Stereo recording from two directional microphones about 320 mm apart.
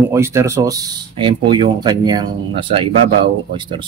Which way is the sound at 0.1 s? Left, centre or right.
Centre.